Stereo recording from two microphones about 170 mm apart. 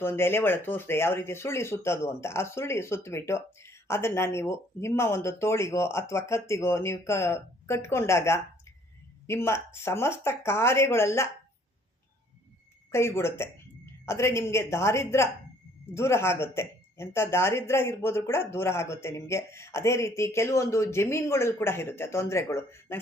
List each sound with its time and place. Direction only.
0.0 s speech: 15° left (ahead or behind)
12.9 s speech: 15° left (ahead or behind)